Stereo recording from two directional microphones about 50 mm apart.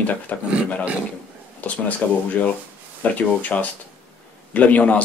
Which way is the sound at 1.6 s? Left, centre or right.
Left.